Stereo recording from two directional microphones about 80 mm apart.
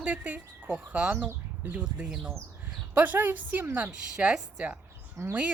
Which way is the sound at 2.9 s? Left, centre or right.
Right.